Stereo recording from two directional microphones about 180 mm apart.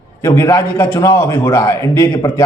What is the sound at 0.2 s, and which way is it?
A man's voice, 15° left (ahead or behind).